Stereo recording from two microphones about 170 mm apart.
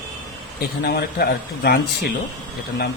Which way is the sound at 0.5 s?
65° left (ahead or behind).